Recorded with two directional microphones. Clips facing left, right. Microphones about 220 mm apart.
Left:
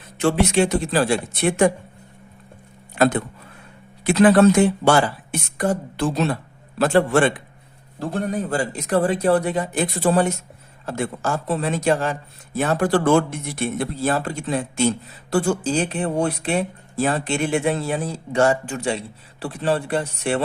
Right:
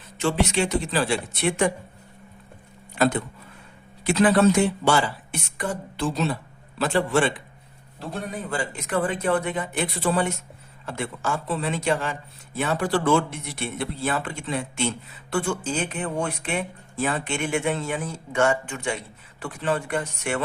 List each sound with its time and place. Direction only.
0.2 s speech: 45° left (ahead or behind)
4.0 s speech: 60° left (ahead or behind); by 20.4 s 30° left (ahead or behind)